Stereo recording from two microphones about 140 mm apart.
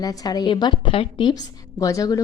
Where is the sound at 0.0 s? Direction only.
25° left (ahead or behind).